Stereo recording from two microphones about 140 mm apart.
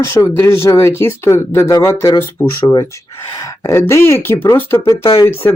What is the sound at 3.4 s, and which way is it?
Speech, 20° left (ahead or behind).